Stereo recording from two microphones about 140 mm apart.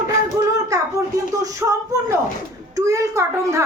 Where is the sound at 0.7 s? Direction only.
25° right (ahead or behind).